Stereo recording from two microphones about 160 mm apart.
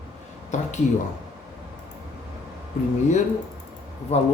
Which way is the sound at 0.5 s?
50° left (ahead or behind).